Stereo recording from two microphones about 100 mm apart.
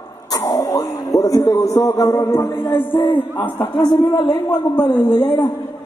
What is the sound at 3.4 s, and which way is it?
Speech, 45° left (ahead or behind).